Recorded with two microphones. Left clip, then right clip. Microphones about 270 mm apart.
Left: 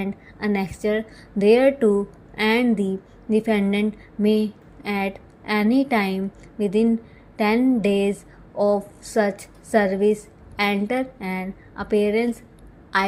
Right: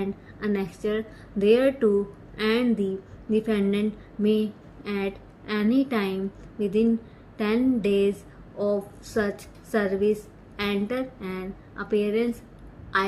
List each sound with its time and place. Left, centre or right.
0.0 s a woman's voice: left